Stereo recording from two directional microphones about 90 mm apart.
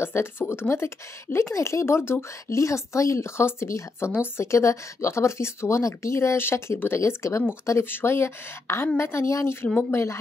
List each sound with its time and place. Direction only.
0.0 s speech: 25° left (ahead or behind)